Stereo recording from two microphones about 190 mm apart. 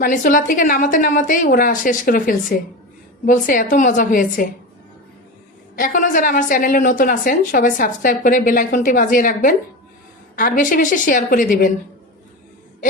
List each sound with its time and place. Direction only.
0.0 s a woman's voice: 45° left (ahead or behind)
5.7 s a woman's voice: 45° left (ahead or behind)